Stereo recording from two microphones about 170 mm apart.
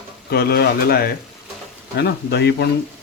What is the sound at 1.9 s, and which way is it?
Speech, 75° left (ahead or behind).